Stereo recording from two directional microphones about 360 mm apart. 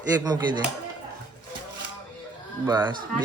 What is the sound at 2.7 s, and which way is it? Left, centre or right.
Speech, centre.